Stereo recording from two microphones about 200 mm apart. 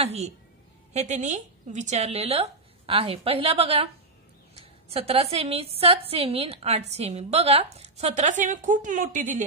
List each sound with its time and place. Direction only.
0.0 s a woman's voice: 30° right (ahead or behind)